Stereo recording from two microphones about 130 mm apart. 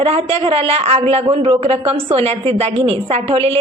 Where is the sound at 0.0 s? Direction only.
50° right (ahead or behind).